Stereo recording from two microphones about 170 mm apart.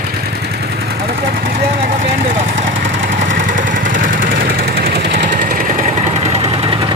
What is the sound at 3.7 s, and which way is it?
Vehicle, 55° right (ahead or behind).